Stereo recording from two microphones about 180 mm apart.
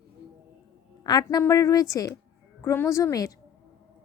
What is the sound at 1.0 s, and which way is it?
A woman's voice, 20° left (ahead or behind).